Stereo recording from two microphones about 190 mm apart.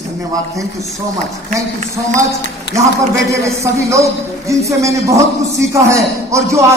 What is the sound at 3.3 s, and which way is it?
A man's voice, 15° right (ahead or behind).